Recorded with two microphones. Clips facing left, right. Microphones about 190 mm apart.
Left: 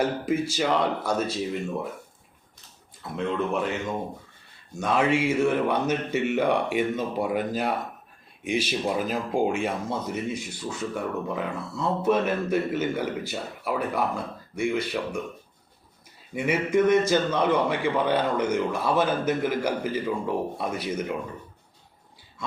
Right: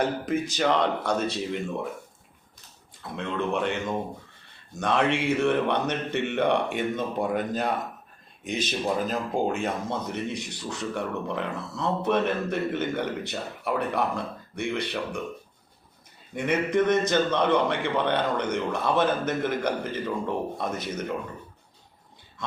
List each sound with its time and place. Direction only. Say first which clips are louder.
0.0 s speech: left 1 dB; 5° left (ahead or behind)
3.0 s speech: left 2 dB; 5° left (ahead or behind)
4.8 s speech: left 1 dB; 5° left (ahead or behind)
16.3 s speech: left 1 dB; 5° left (ahead or behind)